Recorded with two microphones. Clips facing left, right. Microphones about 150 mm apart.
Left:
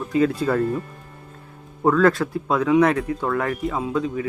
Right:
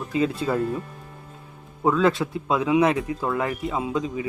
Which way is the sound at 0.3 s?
5° right (ahead or behind).